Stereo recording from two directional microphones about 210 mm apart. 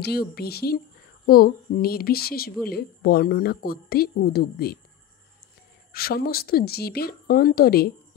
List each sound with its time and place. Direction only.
0.0 s speech: 50° left (ahead or behind)
5.9 s speech: 45° left (ahead or behind)